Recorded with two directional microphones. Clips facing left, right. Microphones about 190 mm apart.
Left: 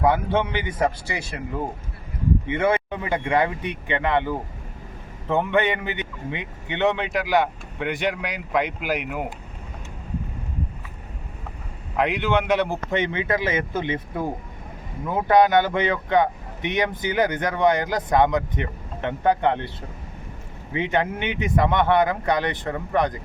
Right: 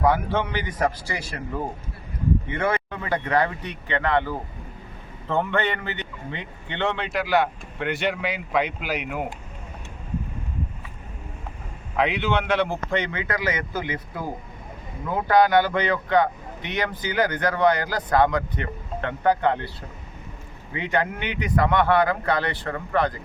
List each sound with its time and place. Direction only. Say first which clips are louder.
0.0 s speech: left 1 dB; 25° left (ahead or behind)
2.5 s speech: left 4 dB; 25° left (ahead or behind)
11.9 s speech: left 1 dB; 10° left (ahead or behind)
20.7 s speech: left 2 dB; 20° left (ahead or behind)